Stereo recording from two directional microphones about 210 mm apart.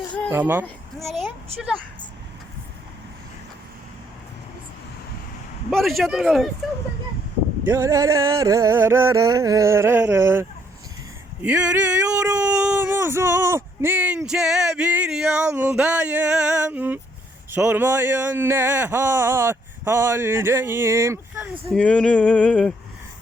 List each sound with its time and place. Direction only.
0.3 s speech: 10° right (ahead or behind)
0.6 s a child's voice: centre (ahead or behind)
5.7 s male singing: centre (ahead or behind)
7.6 s speech: 15° right (ahead or behind)
11.4 s speech: 5° right (ahead or behind)
21.7 s male singing: 5° left (ahead or behind)